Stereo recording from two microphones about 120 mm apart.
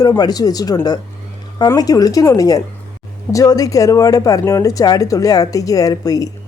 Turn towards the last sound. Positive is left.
turn(degrees=30)  # may be behind; listen again after turning